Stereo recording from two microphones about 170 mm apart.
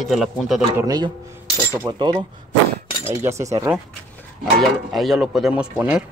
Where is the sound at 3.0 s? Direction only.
15° right (ahead or behind).